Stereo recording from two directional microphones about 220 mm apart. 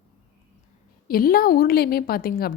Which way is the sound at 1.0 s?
40° left (ahead or behind).